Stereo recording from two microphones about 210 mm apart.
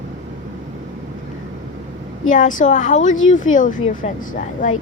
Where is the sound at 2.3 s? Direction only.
35° left (ahead or behind).